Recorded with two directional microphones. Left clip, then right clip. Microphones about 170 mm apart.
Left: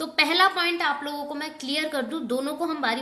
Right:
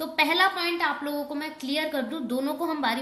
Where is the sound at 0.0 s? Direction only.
20° left (ahead or behind).